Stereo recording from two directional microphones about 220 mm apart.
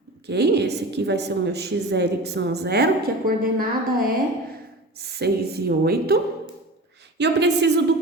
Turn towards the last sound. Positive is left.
turn(degrees=-50)  # may be behind; listen again after turning